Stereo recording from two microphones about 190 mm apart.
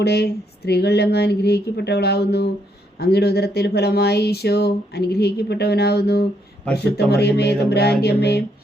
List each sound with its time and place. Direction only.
0.0 s speech: 60° left (ahead or behind)